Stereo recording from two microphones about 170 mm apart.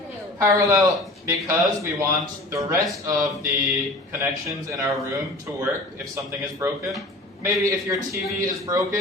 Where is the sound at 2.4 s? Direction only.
15° right (ahead or behind).